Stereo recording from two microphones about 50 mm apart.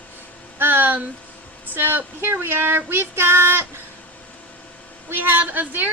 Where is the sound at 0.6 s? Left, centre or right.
Right.